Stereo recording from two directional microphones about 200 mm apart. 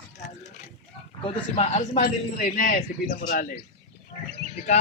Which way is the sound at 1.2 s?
30° left (ahead or behind).